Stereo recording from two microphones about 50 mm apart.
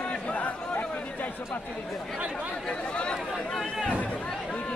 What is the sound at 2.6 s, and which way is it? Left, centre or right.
Chatter, centre.